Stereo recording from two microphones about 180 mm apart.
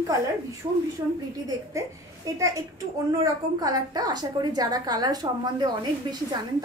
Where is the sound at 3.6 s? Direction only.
20° right (ahead or behind).